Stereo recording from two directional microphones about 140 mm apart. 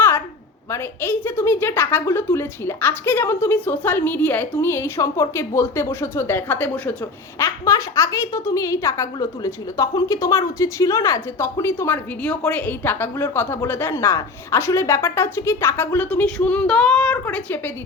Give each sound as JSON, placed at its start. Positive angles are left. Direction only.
{"t": 0.7, "sound": "a woman's voice", "side_deg": 15}